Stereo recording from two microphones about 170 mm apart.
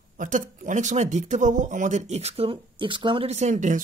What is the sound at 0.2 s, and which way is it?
Speech, 50° right (ahead or behind).